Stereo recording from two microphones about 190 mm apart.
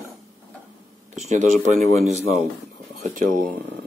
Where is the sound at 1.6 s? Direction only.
40° right (ahead or behind).